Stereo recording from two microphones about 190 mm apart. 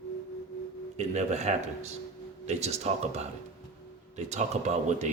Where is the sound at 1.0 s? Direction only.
35° right (ahead or behind).